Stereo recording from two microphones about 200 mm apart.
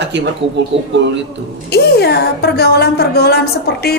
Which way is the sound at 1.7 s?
55° left (ahead or behind).